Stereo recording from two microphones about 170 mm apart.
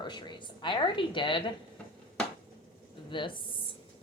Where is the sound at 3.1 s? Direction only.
30° left (ahead or behind).